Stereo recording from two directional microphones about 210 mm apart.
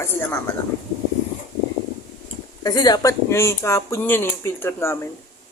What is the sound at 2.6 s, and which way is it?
Speech, 20° left (ahead or behind).